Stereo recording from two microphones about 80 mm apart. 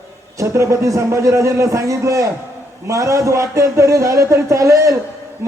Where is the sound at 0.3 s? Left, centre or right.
Right.